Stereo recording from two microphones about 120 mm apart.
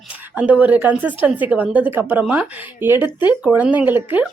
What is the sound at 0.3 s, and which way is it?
A woman's voice, 10° right (ahead or behind).